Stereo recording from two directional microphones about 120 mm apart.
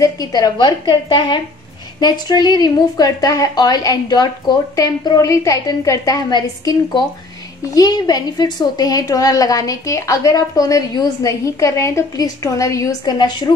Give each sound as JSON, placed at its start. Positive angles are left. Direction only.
{"t": 0.0, "sound": "a woman's voice", "side_deg": 35}